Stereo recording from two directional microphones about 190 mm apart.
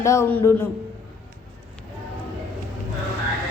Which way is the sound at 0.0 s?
15° left (ahead or behind).